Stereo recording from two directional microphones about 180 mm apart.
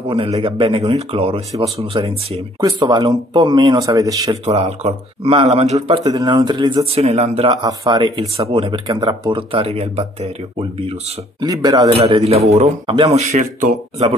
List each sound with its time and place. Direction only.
0.1 s speech: 30° right (ahead or behind)
4.5 s speech: 35° right (ahead or behind)
6.0 s speech: 25° right (ahead or behind)
7.1 s speech: 40° right (ahead or behind)
7.4 s speech: 25° right (ahead or behind)
11.4 s speech: 20° right (ahead or behind)
11.9 s speech: 35° right (ahead or behind)